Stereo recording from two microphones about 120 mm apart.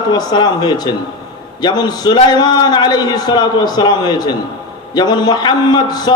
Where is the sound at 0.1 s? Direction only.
35° left (ahead or behind).